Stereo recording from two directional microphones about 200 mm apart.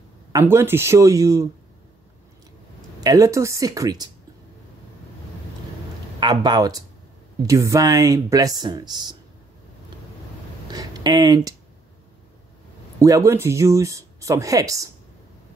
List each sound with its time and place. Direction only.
0.3 s speech: 15° right (ahead or behind)
3.0 s speech: 15° right (ahead or behind)
6.1 s a man's voice: 20° right (ahead or behind)
10.7 s a sound: 20° right (ahead or behind)
13.0 s speech: 15° right (ahead or behind)